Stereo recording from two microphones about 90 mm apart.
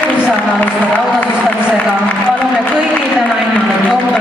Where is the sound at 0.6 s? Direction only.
15° left (ahead or behind).